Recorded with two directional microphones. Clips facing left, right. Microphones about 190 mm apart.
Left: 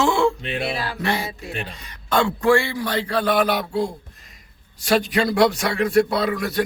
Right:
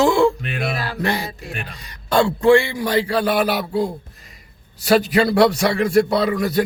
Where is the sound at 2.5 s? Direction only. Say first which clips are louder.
Right 5 dB; 15° right (ahead or behind).